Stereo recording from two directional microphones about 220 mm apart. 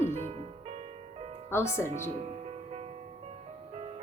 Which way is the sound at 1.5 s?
10° left (ahead or behind).